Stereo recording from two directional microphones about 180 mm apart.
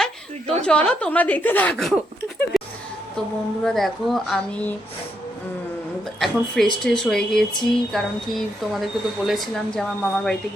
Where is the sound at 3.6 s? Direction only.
Centre (ahead or behind).